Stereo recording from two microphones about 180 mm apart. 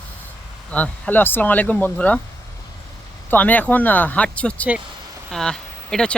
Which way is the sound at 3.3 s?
10° left (ahead or behind).